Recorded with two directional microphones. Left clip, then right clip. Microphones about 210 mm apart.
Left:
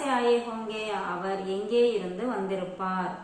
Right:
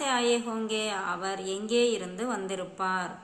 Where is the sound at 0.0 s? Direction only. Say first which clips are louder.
Left 2 dB; 40° right (ahead or behind).